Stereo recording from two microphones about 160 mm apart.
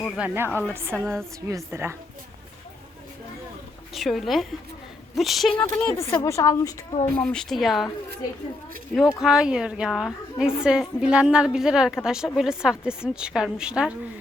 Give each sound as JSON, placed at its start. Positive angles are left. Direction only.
{"t": 0.2, "sound": "a woman's voice", "side_deg": -15}
{"t": 3.9, "sound": "a woman's voice", "side_deg": 0}
{"t": 5.5, "sound": "a woman's voice", "side_deg": 15}
{"t": 7.2, "sound": "a woman's voice", "side_deg": 5}
{"t": 9.1, "sound": "a woman's voice", "side_deg": -5}